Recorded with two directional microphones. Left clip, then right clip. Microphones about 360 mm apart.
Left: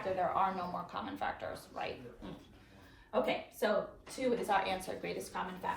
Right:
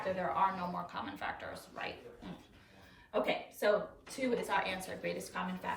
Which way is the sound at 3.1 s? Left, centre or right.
Centre.